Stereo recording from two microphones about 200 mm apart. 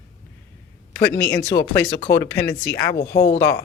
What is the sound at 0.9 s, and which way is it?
Speech, 5° left (ahead or behind).